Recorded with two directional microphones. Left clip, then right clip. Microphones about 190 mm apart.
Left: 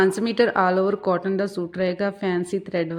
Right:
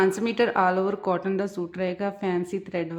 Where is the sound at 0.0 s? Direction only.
20° left (ahead or behind).